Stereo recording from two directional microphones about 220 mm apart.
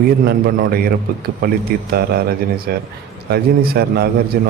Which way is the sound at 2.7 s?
45° right (ahead or behind).